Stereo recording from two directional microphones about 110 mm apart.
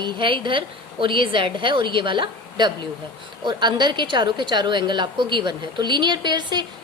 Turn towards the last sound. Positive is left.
turn(degrees=-45)  # may be behind; listen again after turning